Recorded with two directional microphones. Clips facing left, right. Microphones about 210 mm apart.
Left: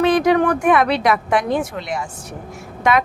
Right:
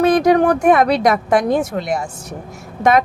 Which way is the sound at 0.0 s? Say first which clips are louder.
Right 2 dB; 40° right (ahead or behind).